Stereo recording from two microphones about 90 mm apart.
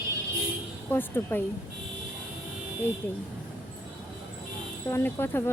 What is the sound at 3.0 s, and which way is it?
Speech, 20° left (ahead or behind).